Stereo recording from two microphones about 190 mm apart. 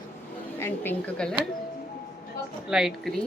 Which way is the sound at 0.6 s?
10° left (ahead or behind).